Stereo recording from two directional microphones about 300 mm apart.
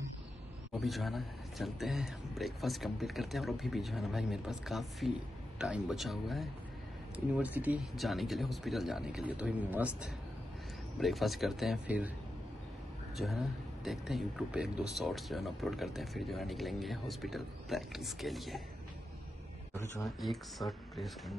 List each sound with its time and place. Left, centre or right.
0.7 s speech: centre
13.1 s a man's voice: centre
19.7 s speech: centre